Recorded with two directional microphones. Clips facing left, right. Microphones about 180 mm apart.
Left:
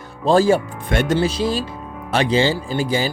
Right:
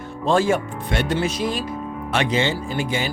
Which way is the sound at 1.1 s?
30° left (ahead or behind).